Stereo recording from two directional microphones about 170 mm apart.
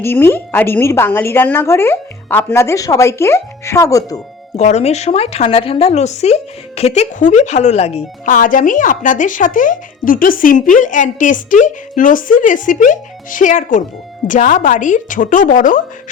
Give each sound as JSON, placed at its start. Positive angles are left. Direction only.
{"t": 0.0, "sound": "a woman's voice", "side_deg": 15}
{"t": 4.5, "sound": "speech", "side_deg": 40}
{"t": 8.3, "sound": "speech", "side_deg": 50}